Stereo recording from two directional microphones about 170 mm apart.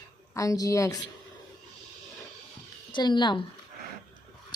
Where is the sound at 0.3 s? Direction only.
20° left (ahead or behind).